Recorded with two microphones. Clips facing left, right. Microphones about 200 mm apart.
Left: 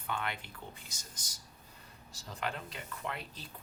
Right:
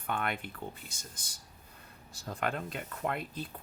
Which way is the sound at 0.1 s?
55° right (ahead or behind).